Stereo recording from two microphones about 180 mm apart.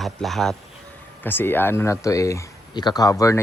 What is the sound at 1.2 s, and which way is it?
Speech, 10° left (ahead or behind).